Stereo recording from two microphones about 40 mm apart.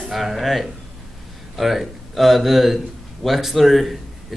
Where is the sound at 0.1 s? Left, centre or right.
Centre.